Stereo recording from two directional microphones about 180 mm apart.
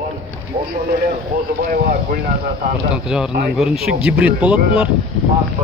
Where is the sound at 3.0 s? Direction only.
Centre (ahead or behind).